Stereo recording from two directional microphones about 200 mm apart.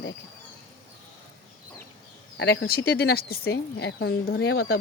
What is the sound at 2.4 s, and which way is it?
Speech, 60° left (ahead or behind).